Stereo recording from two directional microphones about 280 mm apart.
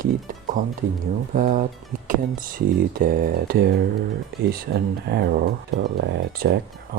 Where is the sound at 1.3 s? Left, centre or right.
Right.